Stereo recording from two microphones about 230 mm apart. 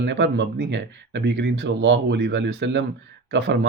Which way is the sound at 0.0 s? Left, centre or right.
Right.